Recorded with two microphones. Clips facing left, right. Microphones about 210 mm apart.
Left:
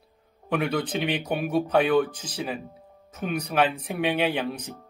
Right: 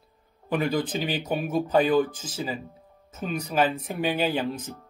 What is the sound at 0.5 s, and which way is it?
Speech, centre (ahead or behind).